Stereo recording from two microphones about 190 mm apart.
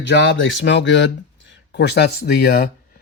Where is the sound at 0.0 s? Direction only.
70° left (ahead or behind); by 2.6 s 50° left (ahead or behind).